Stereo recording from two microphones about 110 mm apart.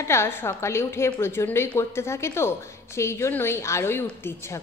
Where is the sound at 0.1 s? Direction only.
20° left (ahead or behind).